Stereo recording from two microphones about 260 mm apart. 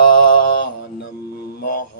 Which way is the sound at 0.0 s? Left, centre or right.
Left.